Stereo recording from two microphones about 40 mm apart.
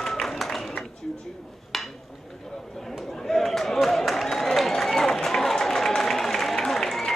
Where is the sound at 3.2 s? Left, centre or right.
Centre.